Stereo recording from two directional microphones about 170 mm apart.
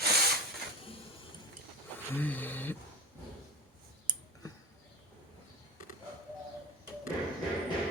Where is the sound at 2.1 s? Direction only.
10° left (ahead or behind).